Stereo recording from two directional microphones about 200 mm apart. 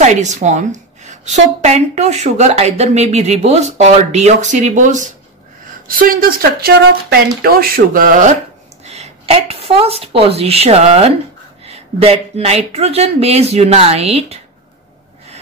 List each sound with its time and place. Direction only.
0.0 s a woman's voice: 35° right (ahead or behind)